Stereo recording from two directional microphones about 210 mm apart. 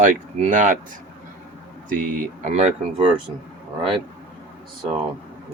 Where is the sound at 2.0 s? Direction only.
35° right (ahead or behind).